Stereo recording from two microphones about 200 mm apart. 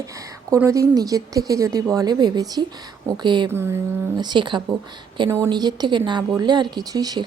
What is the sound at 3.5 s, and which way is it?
Speech, 10° right (ahead or behind).